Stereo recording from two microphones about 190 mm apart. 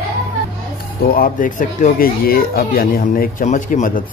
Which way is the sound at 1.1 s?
50° left (ahead or behind).